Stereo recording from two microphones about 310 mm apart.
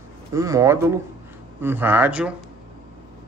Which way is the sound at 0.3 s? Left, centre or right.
Centre.